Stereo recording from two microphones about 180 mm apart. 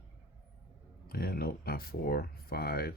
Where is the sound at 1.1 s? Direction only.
60° left (ahead or behind).